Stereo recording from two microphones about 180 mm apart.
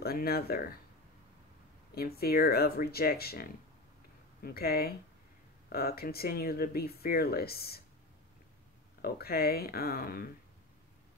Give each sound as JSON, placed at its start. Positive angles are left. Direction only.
{"t": 0.0, "sound": "speech", "side_deg": 60}
{"t": 2.0, "sound": "speech", "side_deg": 60}
{"t": 9.0, "sound": "speech", "side_deg": 55}